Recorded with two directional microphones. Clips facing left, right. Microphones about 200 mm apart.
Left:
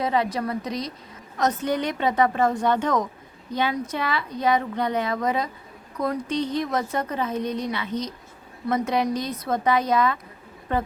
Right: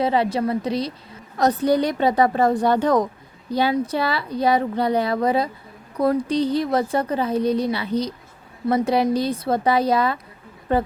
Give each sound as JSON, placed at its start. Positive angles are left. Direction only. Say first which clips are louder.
{"t": 0.0, "sound": "a woman's voice", "louder": "right 4 dB", "side_deg": -30}